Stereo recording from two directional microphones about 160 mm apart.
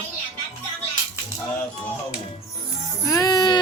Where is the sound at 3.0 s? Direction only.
20° left (ahead or behind).